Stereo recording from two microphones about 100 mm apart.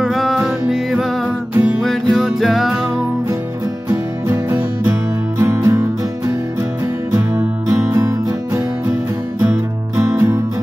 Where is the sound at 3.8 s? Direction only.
35° right (ahead or behind).